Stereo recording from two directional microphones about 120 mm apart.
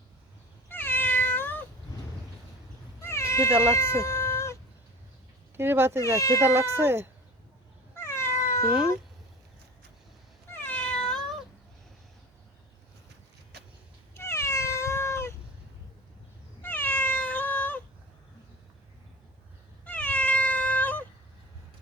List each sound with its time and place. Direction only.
0.7 s cat: 15° left (ahead or behind)
3.0 s cat: 20° left (ahead or behind)
5.5 s speech: 20° right (ahead or behind)
6.1 s speech: 25° left (ahead or behind)
6.4 s speech: 20° right (ahead or behind)
7.9 s cat: 20° left (ahead or behind)
10.5 s cat: 15° left (ahead or behind)
14.1 s cat: 20° left (ahead or behind)
16.6 s cat: 15° left (ahead or behind)
19.8 s cat: 10° left (ahead or behind)